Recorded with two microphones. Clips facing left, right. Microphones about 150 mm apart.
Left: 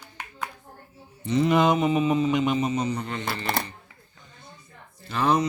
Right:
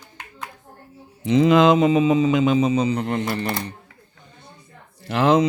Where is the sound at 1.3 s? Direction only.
90° right.